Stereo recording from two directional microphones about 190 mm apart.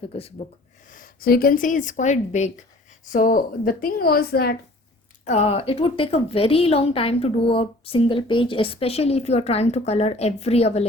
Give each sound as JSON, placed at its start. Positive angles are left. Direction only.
{"t": 0.1, "sound": "a woman's voice", "side_deg": 30}
{"t": 0.9, "sound": "a woman's voice", "side_deg": 45}
{"t": 5.2, "sound": "a woman's voice", "side_deg": 35}